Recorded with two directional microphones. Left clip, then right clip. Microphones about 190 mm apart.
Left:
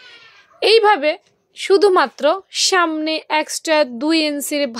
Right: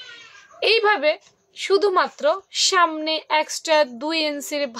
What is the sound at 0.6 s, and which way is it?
A woman's voice, 40° left (ahead or behind).